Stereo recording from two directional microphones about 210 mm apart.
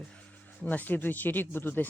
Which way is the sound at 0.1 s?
5° left (ahead or behind).